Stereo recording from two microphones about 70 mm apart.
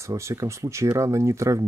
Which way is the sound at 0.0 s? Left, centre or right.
Right.